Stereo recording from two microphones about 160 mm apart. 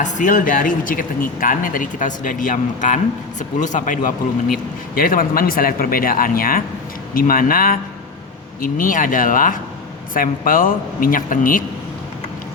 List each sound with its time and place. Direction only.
0.0 s speech: 55° left (ahead or behind)